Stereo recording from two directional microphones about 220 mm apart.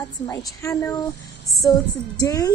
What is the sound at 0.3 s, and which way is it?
A woman's voice, 15° left (ahead or behind).